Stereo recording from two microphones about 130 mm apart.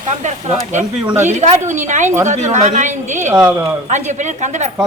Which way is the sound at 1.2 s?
65° right (ahead or behind).